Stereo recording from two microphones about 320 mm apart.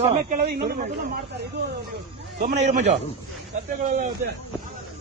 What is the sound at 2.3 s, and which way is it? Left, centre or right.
Speech, right.